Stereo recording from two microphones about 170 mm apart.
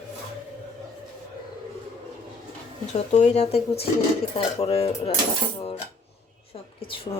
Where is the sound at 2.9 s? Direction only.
40° left (ahead or behind).